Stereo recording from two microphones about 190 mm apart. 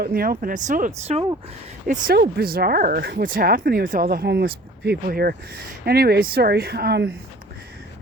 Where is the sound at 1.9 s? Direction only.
50° right (ahead or behind).